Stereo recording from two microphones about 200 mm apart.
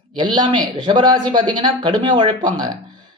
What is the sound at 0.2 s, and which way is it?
A man's voice, 20° right (ahead or behind).